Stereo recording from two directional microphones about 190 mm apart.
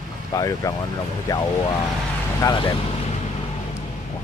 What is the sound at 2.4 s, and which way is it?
Speech, 20° left (ahead or behind).